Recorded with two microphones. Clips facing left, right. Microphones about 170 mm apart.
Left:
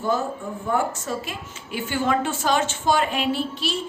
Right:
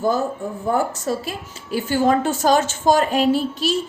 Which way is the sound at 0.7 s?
35° right (ahead or behind).